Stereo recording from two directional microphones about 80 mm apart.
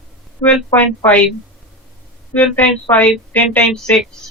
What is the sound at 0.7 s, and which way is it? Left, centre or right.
Speech, left.